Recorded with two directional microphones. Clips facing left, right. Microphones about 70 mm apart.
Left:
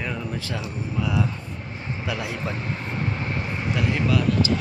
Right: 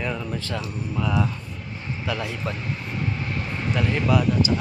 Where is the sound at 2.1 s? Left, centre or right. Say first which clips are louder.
Right 1 dB; centre.